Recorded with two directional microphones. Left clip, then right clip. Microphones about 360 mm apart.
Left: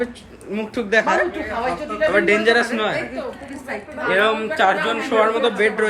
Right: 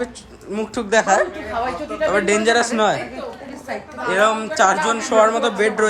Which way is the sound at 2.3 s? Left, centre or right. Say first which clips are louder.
Even; centre.